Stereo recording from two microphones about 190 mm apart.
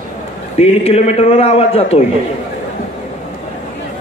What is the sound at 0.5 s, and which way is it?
A man's voice, 35° left (ahead or behind).